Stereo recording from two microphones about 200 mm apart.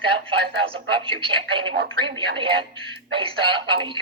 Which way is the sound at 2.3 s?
25° right (ahead or behind).